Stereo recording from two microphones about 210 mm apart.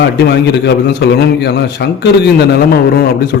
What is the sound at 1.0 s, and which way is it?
Speech, 55° left (ahead or behind).